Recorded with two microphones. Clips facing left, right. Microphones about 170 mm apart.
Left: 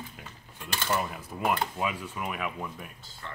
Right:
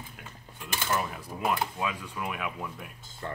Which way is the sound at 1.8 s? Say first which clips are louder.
Left 1 dB; 10° left (ahead or behind).